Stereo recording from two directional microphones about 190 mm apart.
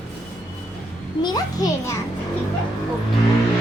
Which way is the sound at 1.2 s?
20° left (ahead or behind).